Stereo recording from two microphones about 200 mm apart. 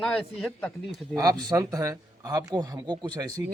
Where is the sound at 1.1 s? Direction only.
20° right (ahead or behind).